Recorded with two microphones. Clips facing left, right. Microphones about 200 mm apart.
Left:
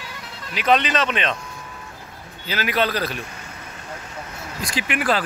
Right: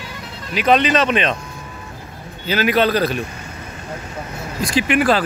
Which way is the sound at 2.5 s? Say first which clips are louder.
Right 6 dB; 20° right (ahead or behind).